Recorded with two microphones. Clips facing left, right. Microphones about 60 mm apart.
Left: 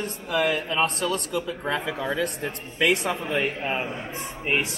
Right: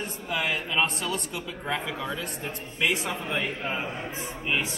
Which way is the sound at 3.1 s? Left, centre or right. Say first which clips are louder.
Left 4 dB; left.